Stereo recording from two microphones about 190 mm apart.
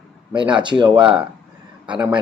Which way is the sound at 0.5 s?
25° right (ahead or behind).